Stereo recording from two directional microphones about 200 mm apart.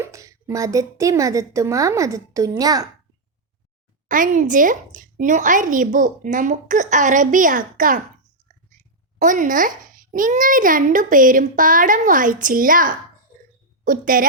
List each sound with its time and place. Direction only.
0.0 s a woman's voice: 15° right (ahead or behind)
4.1 s a woman's voice: 40° right (ahead or behind)
9.1 s a child's voice: 40° right (ahead or behind)